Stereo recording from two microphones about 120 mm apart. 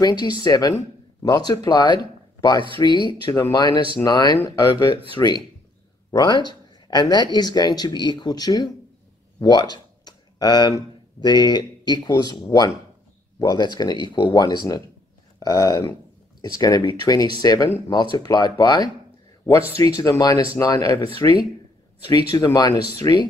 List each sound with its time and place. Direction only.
0.0 s speech: 40° left (ahead or behind)
9.4 s a sound: 35° left (ahead or behind)
11.1 s speech: 35° left (ahead or behind)
17.6 s speech: 20° left (ahead or behind)
18.1 s speech: 35° left (ahead or behind)
22.1 s speech: 30° left (ahead or behind)